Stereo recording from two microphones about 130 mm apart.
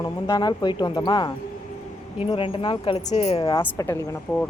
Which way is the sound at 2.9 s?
60° left (ahead or behind).